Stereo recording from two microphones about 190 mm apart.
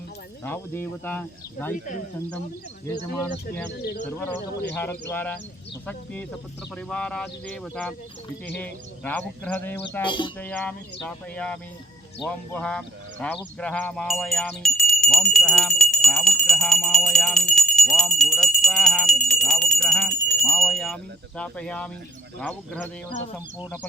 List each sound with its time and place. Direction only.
0.4 s speech: 10° left (ahead or behind)
4.8 s speech: 10° left (ahead or behind)
10.0 s speech: 25° left (ahead or behind)
10.3 s speech: 5° left (ahead or behind)